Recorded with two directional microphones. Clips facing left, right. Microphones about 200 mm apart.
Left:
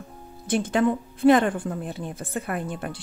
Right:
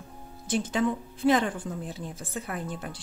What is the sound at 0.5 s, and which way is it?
Speech, 60° left (ahead or behind).